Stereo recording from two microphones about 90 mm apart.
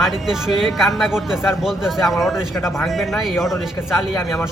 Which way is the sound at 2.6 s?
30° left (ahead or behind).